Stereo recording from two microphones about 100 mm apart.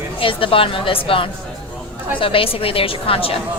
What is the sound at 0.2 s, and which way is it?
A woman's voice, 60° left (ahead or behind).